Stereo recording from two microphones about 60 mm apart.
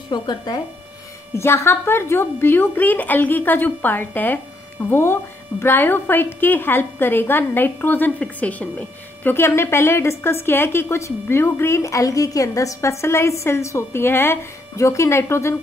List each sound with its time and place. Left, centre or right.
1.3 s a woman's voice: left
9.3 s a woman's voice: left
11.8 s a woman's voice: left
14.8 s a woman's voice: left